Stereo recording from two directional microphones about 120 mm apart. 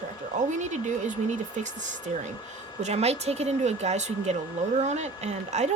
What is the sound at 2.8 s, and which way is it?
Speech, 60° right (ahead or behind).